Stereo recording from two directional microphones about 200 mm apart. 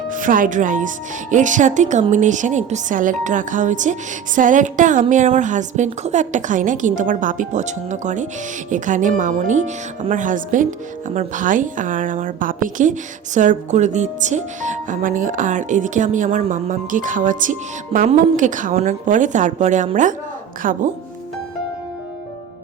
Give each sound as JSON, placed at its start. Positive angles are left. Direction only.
{"t": 0.1, "sound": "speech", "side_deg": -40}